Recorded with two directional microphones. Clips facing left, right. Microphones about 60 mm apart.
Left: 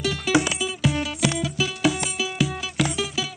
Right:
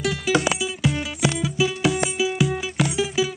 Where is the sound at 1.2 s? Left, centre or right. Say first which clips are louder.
Right 5 dB; centre.